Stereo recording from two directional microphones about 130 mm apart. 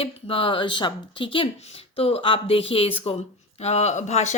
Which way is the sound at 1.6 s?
55° left (ahead or behind).